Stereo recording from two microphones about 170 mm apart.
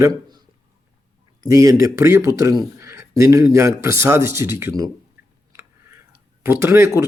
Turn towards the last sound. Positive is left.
turn(degrees=-15)  # may be behind; listen again after turning